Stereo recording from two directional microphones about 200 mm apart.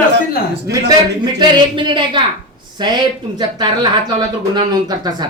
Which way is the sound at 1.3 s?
25° right (ahead or behind).